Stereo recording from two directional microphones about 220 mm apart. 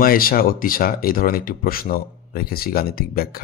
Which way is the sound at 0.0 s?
40° left (ahead or behind).